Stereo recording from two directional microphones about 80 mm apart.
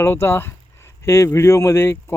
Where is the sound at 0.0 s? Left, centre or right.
Left.